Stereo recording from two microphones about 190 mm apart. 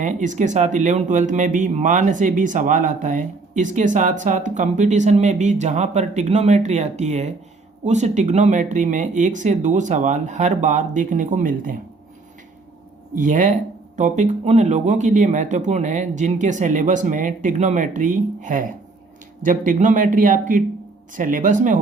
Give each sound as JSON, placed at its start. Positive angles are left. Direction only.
{"t": 0.0, "sound": "speech", "side_deg": -40}
{"t": 13.1, "sound": "speech", "side_deg": -40}